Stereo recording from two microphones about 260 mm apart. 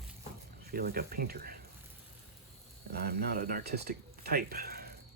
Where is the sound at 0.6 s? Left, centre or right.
Right.